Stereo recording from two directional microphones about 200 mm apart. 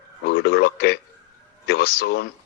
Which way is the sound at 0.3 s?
55° left (ahead or behind).